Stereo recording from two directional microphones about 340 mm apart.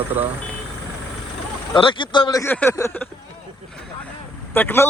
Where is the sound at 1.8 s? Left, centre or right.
Centre.